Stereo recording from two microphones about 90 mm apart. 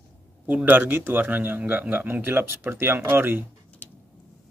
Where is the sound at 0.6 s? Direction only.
20° right (ahead or behind).